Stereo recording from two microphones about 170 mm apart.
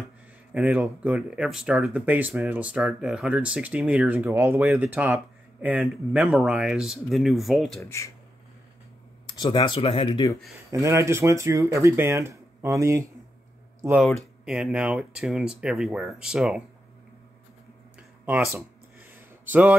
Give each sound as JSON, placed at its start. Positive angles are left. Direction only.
{"t": 0.5, "sound": "speech", "side_deg": -5}
{"t": 7.8, "sound": "speech", "side_deg": 15}
{"t": 9.2, "sound": "speech", "side_deg": 25}
{"t": 10.7, "sound": "speech", "side_deg": -15}
{"t": 13.9, "sound": "speech", "side_deg": 0}
{"t": 18.2, "sound": "a sound", "side_deg": -10}